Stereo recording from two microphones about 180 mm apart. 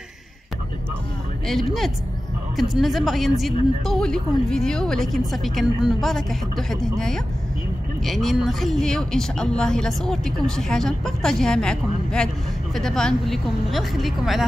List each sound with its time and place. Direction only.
1.5 s speech: centre (ahead or behind)